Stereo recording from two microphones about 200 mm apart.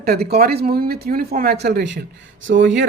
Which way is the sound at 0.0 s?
55° right (ahead or behind).